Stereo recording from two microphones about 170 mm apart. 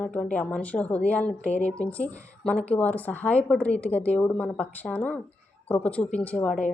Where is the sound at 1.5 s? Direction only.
40° left (ahead or behind).